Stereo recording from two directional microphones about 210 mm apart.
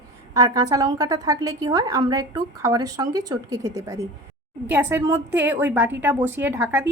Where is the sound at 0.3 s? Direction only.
15° right (ahead or behind).